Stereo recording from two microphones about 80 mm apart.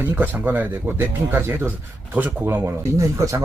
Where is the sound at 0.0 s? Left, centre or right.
Right.